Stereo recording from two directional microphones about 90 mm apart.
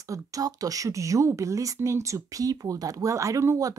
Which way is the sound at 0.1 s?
40° right (ahead or behind).